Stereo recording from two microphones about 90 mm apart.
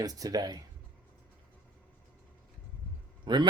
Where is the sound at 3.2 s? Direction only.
55° right (ahead or behind).